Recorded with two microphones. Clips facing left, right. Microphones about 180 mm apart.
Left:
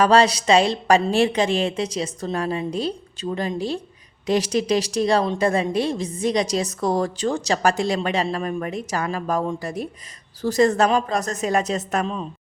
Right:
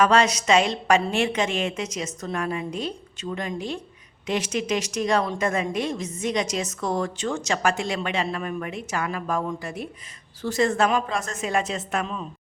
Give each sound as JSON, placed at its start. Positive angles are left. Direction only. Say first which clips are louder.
{"t": 0.0, "sound": "a woman's voice", "louder": "left 3 dB", "side_deg": 35}